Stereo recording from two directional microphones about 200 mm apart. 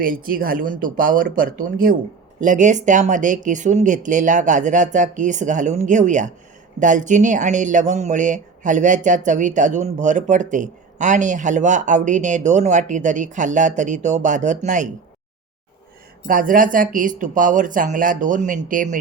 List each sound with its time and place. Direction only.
0.0 s speech: 45° right (ahead or behind)
16.2 s speech: 45° right (ahead or behind)